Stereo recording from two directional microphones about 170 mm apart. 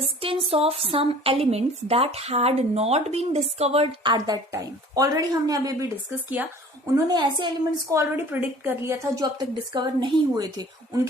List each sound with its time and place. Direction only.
0.0 s a woman's voice: 35° right (ahead or behind)
7.9 s a woman's voice: 10° right (ahead or behind)